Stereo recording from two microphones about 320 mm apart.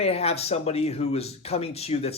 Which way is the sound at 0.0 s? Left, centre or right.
Centre.